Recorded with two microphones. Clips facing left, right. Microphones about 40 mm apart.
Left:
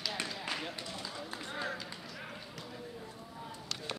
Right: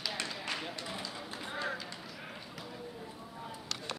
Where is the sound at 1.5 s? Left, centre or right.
Centre.